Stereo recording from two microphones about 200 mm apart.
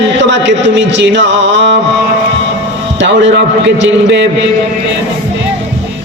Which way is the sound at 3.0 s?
60° right (ahead or behind).